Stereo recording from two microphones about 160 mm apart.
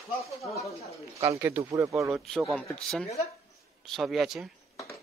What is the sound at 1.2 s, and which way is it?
Speech, 15° right (ahead or behind).